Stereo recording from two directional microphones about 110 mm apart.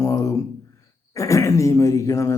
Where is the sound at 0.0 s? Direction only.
30° left (ahead or behind).